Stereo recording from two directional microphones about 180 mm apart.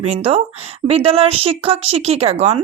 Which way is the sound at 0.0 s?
35° right (ahead or behind).